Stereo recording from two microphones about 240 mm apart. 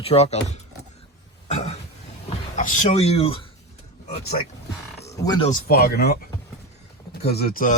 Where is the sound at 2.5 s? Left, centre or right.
Left.